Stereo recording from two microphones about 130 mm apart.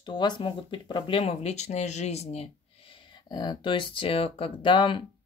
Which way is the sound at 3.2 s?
35° left (ahead or behind).